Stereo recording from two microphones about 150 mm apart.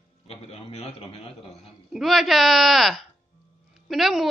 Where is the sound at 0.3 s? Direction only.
45° left (ahead or behind).